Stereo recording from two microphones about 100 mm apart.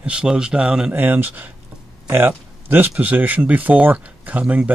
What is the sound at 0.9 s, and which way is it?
Speech, 20° right (ahead or behind).